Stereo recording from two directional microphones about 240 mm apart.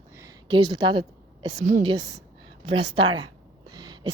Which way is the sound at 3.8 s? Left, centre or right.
Centre.